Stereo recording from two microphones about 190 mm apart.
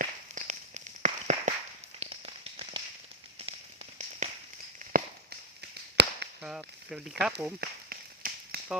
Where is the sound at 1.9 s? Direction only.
30° right (ahead or behind).